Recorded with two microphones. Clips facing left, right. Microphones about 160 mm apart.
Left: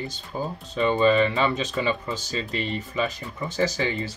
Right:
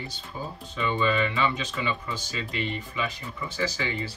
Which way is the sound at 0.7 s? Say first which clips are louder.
Left 6 dB; 40° left (ahead or behind).